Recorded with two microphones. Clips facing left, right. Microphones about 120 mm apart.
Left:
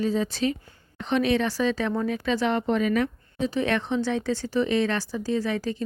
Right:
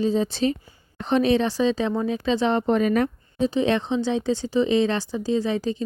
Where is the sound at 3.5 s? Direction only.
25° right (ahead or behind).